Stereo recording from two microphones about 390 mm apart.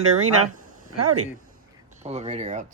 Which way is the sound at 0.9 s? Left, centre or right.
Right.